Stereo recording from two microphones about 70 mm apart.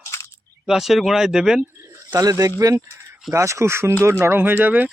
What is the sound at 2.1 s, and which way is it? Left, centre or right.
Speech, right.